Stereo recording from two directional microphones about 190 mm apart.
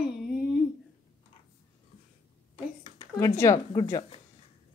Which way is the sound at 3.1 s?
15° left (ahead or behind).